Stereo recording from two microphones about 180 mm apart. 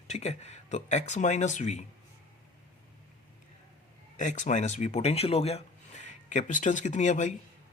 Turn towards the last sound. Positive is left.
turn(degrees=45)  # may be behind; listen again after turning